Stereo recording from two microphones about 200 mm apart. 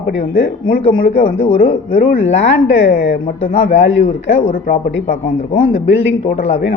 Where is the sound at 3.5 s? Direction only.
30° left (ahead or behind).